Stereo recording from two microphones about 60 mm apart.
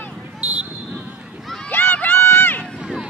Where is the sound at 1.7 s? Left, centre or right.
Left.